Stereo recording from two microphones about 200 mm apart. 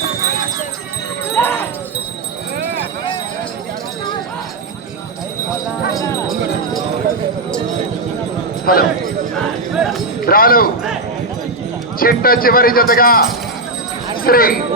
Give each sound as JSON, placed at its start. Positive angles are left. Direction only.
{"t": 1.4, "sound": "jingle bell", "side_deg": 10}
{"t": 8.7, "sound": "speech", "side_deg": 45}
{"t": 9.3, "sound": "clip-clop", "side_deg": 0}
{"t": 10.2, "sound": "a sound", "side_deg": 45}
{"t": 11.9, "sound": "speech", "side_deg": 45}
{"t": 14.3, "sound": "speech", "side_deg": 45}